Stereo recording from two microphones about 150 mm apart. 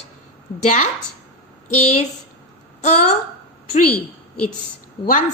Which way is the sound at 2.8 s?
50° left (ahead or behind).